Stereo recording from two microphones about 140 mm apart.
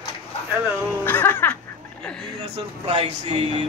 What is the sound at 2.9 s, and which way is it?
Speech, 40° right (ahead or behind).